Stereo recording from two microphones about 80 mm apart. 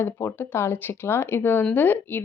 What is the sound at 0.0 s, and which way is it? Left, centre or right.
A woman's voice, left.